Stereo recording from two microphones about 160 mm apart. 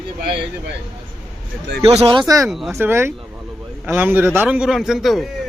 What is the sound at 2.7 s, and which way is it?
A man's voice, 15° right (ahead or behind).